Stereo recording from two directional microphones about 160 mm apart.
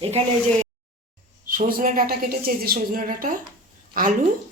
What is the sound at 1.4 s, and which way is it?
A woman's voice, 60° right (ahead or behind).